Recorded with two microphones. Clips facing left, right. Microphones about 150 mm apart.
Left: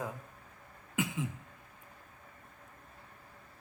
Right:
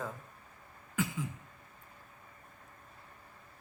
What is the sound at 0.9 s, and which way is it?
Throat clearing, 20° left (ahead or behind).